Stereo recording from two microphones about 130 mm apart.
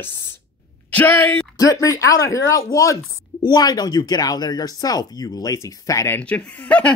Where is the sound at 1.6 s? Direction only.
25° left (ahead or behind); by 6.9 s 10° left (ahead or behind).